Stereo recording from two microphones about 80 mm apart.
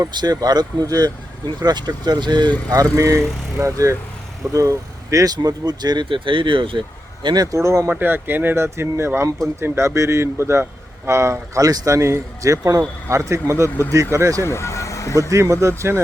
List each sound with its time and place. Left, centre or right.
0.2 s speech: right
2.6 s speech: right
7.5 s speech: right
7.9 s speech: right
14.4 s speech: left
15.3 s speech: right